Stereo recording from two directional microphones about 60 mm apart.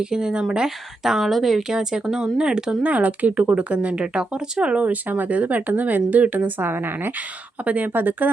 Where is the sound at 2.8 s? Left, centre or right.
Right.